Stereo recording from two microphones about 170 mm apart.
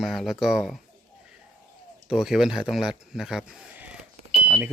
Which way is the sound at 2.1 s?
5° right (ahead or behind).